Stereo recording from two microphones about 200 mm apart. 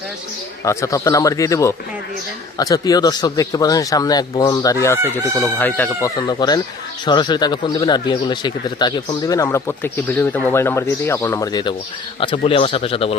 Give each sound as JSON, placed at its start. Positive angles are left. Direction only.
{"t": 0.6, "sound": "speech", "side_deg": 15}
{"t": 6.2, "sound": "speech", "side_deg": 20}